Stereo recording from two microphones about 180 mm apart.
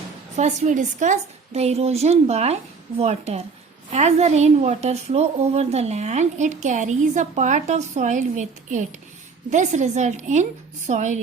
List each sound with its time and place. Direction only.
0.3 s a woman's voice: 40° right (ahead or behind)